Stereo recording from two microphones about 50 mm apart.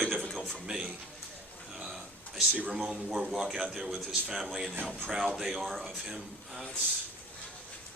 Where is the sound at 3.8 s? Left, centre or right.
Centre.